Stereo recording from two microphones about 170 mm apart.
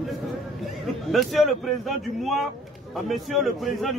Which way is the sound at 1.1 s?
Centre (ahead or behind).